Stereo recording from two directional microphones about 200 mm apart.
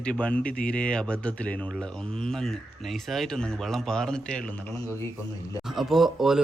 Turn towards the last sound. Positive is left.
turn(degrees=0)  # may be behind; listen again after turning